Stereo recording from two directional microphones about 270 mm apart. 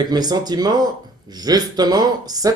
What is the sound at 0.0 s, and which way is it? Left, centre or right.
Speech, centre.